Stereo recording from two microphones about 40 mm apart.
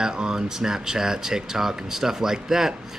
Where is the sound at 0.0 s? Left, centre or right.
Centre.